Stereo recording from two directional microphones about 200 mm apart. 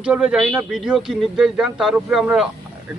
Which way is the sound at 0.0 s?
5° right (ahead or behind).